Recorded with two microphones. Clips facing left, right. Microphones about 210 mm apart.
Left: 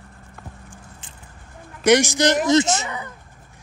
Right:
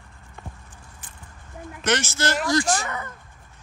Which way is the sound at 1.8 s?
15° left (ahead or behind).